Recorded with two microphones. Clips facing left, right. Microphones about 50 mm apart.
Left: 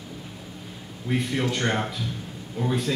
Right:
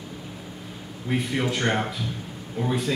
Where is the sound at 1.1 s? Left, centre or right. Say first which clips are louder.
Even; centre.